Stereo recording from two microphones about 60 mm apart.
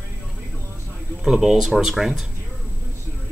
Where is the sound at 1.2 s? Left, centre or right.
Centre.